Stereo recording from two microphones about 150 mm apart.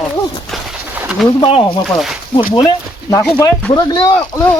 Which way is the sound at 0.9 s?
5° right (ahead or behind).